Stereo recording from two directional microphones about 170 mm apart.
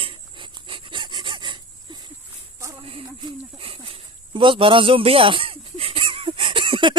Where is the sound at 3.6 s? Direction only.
30° right (ahead or behind).